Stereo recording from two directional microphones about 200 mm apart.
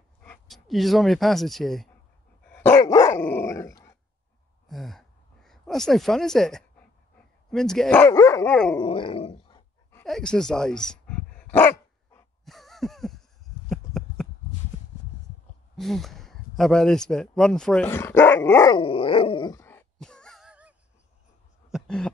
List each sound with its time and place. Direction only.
0.2 s speech: 5° left (ahead or behind)
2.5 s dog: 10° left (ahead or behind)
4.6 s a sound: centre (ahead or behind)
7.5 s speech: centre (ahead or behind)
8.1 s dog: 15° left (ahead or behind)
8.7 s dog: 25° left (ahead or behind)
10.0 s dog: 5° left (ahead or behind)
12.4 s a sound: centre (ahead or behind)
15.7 s a sound: centre (ahead or behind)